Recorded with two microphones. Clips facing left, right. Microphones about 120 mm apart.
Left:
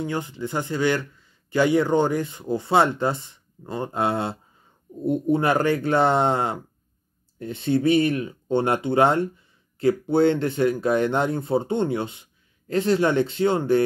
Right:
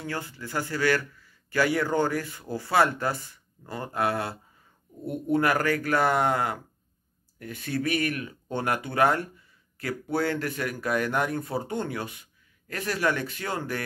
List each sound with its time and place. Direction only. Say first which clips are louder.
0.0 s a man's voice: left 7 dB; 20° left (ahead or behind)